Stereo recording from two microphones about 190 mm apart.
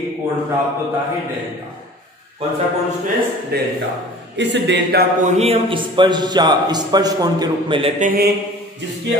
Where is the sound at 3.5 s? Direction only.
55° right (ahead or behind).